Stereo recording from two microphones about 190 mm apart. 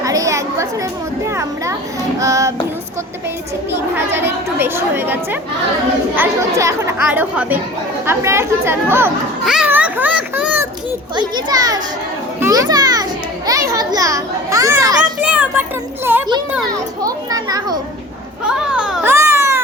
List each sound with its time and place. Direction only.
0.0 s chatter: 15° right (ahead or behind)
2.1 s a woman's voice: 15° right (ahead or behind)
3.7 s a woman's voice: 10° right (ahead or behind)
6.6 s a woman's voice: 15° right (ahead or behind)
9.4 s a sound: 5° right (ahead or behind)
11.1 s a child's voice: 25° right (ahead or behind)
15.2 s child singing: 5° right (ahead or behind)
16.1 s a woman's voice: 10° right (ahead or behind)
18.4 s speech: 5° right (ahead or behind)
19.1 s baby cry: 15° right (ahead or behind)